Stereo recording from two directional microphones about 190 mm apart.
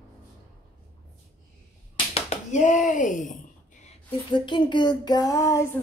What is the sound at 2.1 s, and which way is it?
Speech, 40° left (ahead or behind).